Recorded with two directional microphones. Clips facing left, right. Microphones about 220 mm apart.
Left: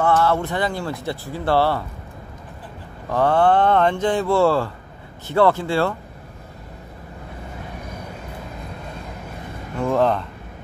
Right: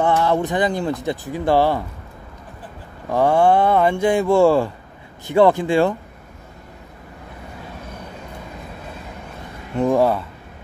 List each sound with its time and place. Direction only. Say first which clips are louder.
0.0 s speech: right 1 dB; 15° right (ahead or behind)
3.1 s speech: right 2 dB; 10° right (ahead or behind)
9.8 s speech: right 2 dB; 15° right (ahead or behind)